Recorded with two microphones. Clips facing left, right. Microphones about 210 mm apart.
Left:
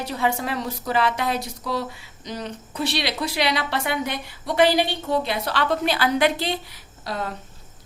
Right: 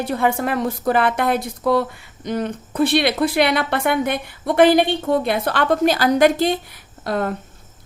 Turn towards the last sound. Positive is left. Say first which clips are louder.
# right 7 dB
turn(degrees=-55)  # may be behind; listen again after turning